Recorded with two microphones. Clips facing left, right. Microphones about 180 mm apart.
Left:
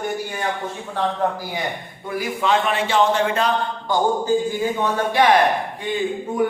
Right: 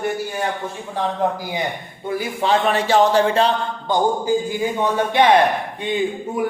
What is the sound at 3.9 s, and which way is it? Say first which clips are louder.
Speech: right 1 dB; 15° right (ahead or behind).